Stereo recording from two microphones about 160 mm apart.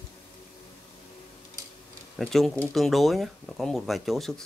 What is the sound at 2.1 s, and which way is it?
Speech, centre (ahead or behind).